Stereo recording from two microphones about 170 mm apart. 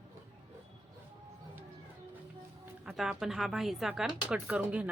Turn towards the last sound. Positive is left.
turn(degrees=-10)  # may be behind; listen again after turning